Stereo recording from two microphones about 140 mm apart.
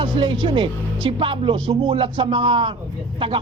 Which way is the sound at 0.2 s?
35° right (ahead or behind).